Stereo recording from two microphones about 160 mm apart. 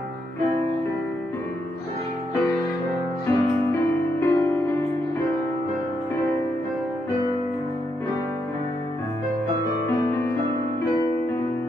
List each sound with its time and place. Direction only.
3.3 s music: 15° left (ahead or behind)